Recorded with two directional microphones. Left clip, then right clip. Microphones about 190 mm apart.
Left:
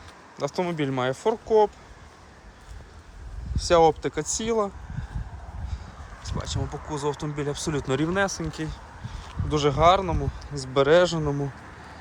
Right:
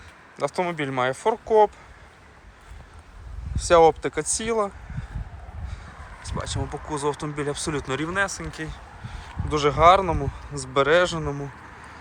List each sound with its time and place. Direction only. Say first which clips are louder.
0.3 s speech: right 2 dB; 15° left (ahead or behind)
3.5 s speech: right 3 dB; 10° left (ahead or behind)
5.8 s a sound: right 3 dB; 15° left (ahead or behind)
6.8 s speech: right 2 dB; 15° left (ahead or behind)